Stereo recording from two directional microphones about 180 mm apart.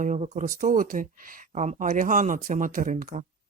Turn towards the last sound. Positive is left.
turn(degrees=-45)  # may be behind; listen again after turning